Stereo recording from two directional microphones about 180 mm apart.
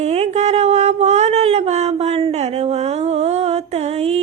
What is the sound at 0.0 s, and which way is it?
Mantra, 40° right (ahead or behind).